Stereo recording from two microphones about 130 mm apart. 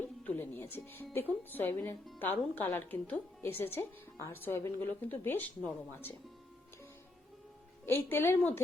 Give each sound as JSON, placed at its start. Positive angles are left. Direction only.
{"t": 0.0, "sound": "speech", "side_deg": 15}
{"t": 7.9, "sound": "speech", "side_deg": 15}